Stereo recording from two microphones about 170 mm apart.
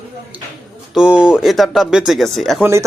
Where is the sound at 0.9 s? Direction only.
5° right (ahead or behind).